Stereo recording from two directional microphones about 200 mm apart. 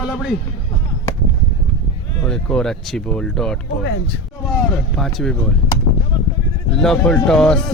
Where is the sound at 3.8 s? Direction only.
60° left (ahead or behind).